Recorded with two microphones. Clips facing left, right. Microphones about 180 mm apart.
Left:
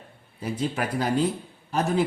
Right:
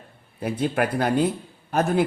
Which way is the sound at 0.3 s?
60° right (ahead or behind).